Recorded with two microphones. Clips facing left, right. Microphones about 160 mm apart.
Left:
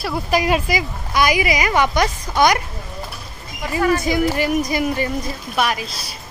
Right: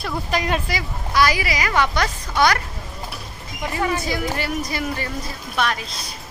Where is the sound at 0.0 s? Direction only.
10° left (ahead or behind).